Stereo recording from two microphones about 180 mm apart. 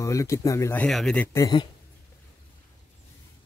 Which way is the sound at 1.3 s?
20° left (ahead or behind).